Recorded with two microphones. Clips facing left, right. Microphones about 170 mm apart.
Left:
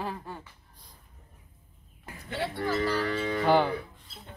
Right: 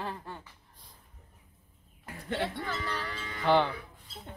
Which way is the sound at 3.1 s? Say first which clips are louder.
Left 12 dB; 60° left (ahead or behind).